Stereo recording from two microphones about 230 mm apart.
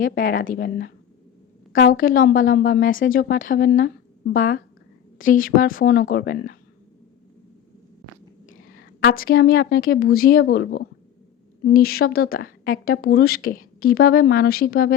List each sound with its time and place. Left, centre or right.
0.0 s speech: left
8.4 s a sound: left
9.0 s speech: left